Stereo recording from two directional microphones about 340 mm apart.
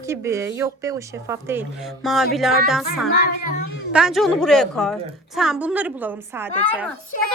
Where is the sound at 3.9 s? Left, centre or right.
Centre.